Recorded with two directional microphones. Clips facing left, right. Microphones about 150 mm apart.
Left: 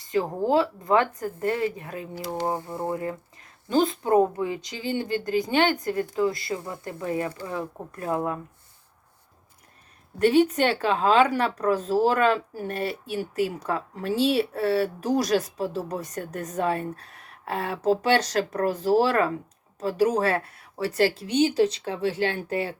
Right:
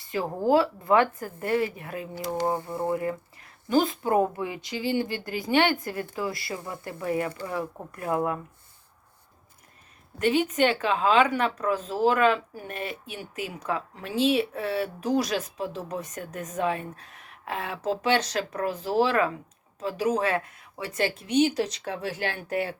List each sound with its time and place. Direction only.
0.0 s a woman's voice: 20° left (ahead or behind)
2.6 s speech: centre (ahead or behind)
2.9 s a woman's voice: 20° left (ahead or behind)
10.2 s speech: 35° left (ahead or behind)